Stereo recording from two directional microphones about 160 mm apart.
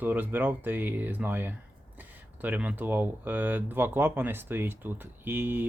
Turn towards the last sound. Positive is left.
turn(degrees=-10)  # may be behind; listen again after turning